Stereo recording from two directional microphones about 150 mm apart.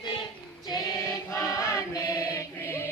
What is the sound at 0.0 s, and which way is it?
Female singing, 30° left (ahead or behind).